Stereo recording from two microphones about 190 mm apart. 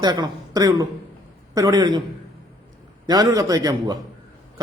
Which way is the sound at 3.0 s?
20° right (ahead or behind).